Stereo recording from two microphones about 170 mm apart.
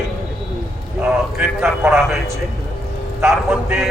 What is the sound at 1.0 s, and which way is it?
A man's voice, 5° right (ahead or behind).